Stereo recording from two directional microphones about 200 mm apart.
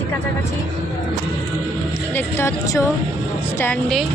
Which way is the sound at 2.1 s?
15° left (ahead or behind).